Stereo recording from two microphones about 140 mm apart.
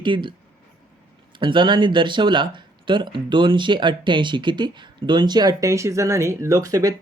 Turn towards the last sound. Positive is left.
turn(degrees=-25)  # may be behind; listen again after turning